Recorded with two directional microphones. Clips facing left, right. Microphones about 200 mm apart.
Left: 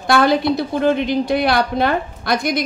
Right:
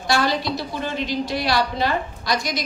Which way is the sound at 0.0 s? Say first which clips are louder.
Left 7 dB; 55° left (ahead or behind).